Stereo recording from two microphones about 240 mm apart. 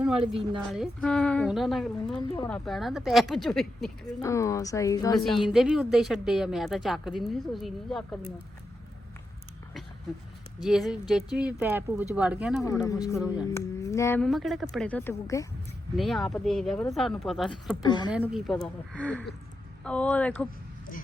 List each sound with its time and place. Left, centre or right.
0.7 s speech: centre
2.1 s speech: centre
2.5 s speech: centre
4.0 s speech: centre
5.4 s speech: centre
10.6 s speech: centre
12.8 s speech: centre
16.0 s speech: centre
17.8 s speech: centre
18.2 s speech: centre